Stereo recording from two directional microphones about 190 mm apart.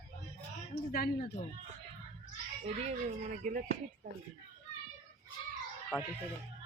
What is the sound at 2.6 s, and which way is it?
Speech, 35° right (ahead or behind).